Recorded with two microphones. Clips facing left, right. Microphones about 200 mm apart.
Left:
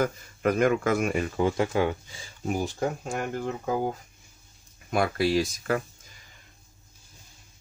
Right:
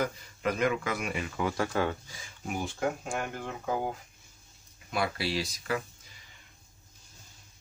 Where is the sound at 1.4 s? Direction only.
20° left (ahead or behind).